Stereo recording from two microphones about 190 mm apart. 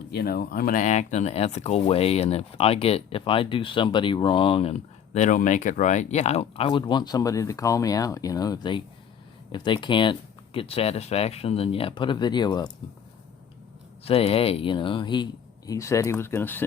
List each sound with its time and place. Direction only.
0.1 s speech: 55° left (ahead or behind); by 12.7 s 20° left (ahead or behind)
14.0 s speech: 30° left (ahead or behind); by 16.6 s 10° left (ahead or behind)